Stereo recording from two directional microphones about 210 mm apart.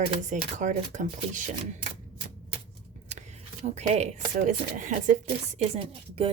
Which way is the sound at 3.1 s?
35° right (ahead or behind).